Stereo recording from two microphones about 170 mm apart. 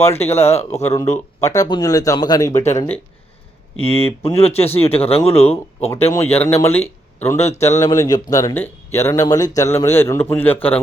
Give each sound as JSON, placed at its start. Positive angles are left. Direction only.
{"t": 0.2, "sound": "speech", "side_deg": 40}
{"t": 0.8, "sound": "a man's voice", "side_deg": 15}
{"t": 3.8, "sound": "speech", "side_deg": 35}
{"t": 6.6, "sound": "a man's voice", "side_deg": 15}
{"t": 7.5, "sound": "speech", "side_deg": 40}
{"t": 7.8, "sound": "a man's voice", "side_deg": 20}